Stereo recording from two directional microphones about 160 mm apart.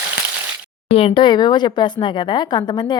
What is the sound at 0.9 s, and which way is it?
A woman's voice, 35° left (ahead or behind).